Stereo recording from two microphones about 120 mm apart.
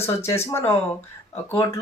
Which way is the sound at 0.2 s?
20° left (ahead or behind).